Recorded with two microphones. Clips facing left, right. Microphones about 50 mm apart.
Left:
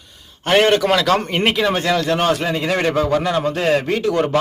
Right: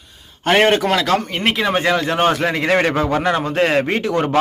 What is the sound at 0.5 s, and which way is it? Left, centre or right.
Speech, right.